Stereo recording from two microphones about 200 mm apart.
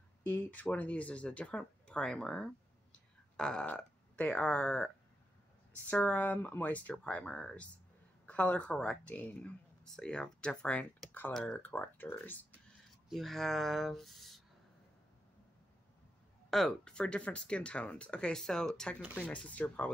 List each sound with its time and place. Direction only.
0.3 s speech: 10° left (ahead or behind)
16.4 s speech: centre (ahead or behind)